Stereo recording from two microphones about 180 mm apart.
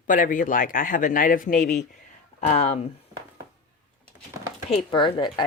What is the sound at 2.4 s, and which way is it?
Speech, 35° left (ahead or behind).